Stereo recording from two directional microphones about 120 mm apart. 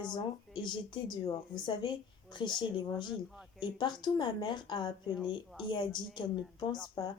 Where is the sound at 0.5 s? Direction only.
40° left (ahead or behind).